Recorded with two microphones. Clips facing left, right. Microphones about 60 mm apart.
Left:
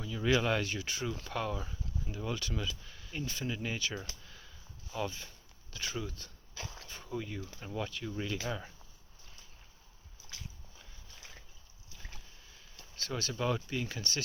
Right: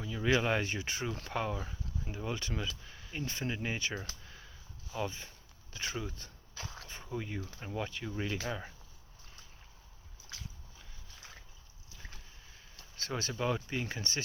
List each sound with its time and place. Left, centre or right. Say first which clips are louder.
0.0 s speech: even; centre
3.2 s speech: right 1 dB; right; by 8.7 s centre
13.0 s speech: even; right
13.3 s speech: left 1 dB; centre